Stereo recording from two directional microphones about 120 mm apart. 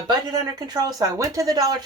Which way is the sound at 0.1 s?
35° right (ahead or behind).